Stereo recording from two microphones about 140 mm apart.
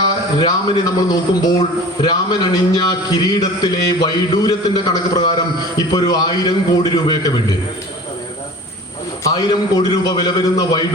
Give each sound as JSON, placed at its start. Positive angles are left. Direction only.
{"t": 0.3, "sound": "a man's voice", "side_deg": 30}
{"t": 9.2, "sound": "a man's voice", "side_deg": 30}